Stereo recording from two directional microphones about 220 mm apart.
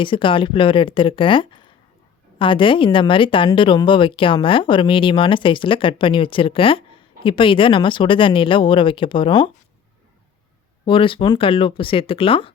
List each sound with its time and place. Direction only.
0.0 s speech: 25° left (ahead or behind)
10.8 s speech: 25° left (ahead or behind)